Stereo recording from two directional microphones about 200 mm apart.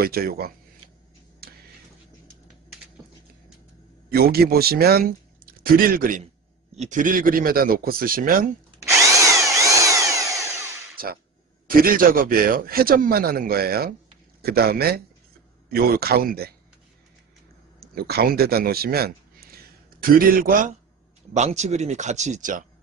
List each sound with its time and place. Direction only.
0.0 s speech: 50° right (ahead or behind)
1.4 s a sound: 50° right (ahead or behind)
4.1 s speech: 50° right (ahead or behind)
8.8 s drill: 15° right (ahead or behind)
11.6 s speech: 45° right (ahead or behind)
17.7 s speech: 50° right (ahead or behind)